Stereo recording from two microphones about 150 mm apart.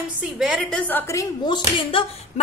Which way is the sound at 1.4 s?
30° left (ahead or behind).